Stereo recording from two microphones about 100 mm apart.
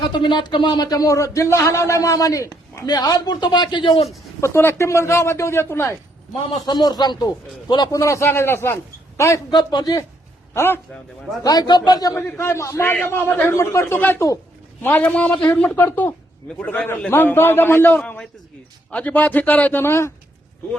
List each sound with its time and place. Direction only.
0.1 s speech: 50° left (ahead or behind)
4.4 s a man's voice: 25° left (ahead or behind)
6.7 s speech: 45° left (ahead or behind)
7.9 s a man's voice: 30° left (ahead or behind)
10.5 s a man's voice: 25° left (ahead or behind)
11.4 s speech: 45° left (ahead or behind)
12.4 s a man's voice: 30° left (ahead or behind)
16.6 s a man's voice: 10° left (ahead or behind)
18.0 s a man's voice: 10° left (ahead or behind); by 20.1 s 25° left (ahead or behind)